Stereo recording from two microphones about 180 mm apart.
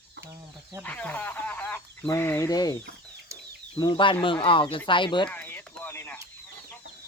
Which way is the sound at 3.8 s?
25° left (ahead or behind).